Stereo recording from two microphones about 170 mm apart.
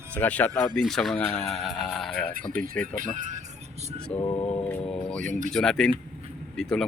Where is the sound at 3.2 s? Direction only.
45° right (ahead or behind).